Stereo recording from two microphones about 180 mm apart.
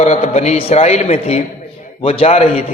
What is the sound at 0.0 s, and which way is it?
A man's voice, 40° left (ahead or behind).